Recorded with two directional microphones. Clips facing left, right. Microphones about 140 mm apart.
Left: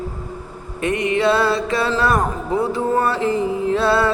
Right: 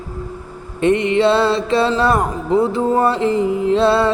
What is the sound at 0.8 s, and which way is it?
Music, 25° right (ahead or behind).